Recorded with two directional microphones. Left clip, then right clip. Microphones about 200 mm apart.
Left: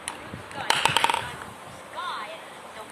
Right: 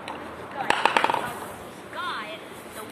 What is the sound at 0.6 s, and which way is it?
Fireworks, 45° left (ahead or behind).